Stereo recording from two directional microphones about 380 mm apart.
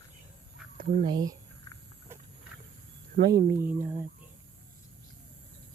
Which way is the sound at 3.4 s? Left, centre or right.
Right.